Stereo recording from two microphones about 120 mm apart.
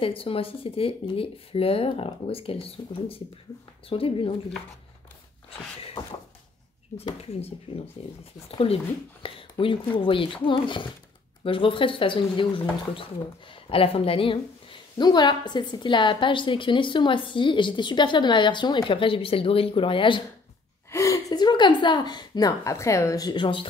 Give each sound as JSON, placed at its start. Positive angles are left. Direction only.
{"t": 0.0, "sound": "a woman's voice", "side_deg": 50}
{"t": 7.2, "sound": "a woman's voice", "side_deg": 60}
{"t": 20.9, "sound": "gasp", "side_deg": 25}
{"t": 22.6, "sound": "a woman's voice", "side_deg": 25}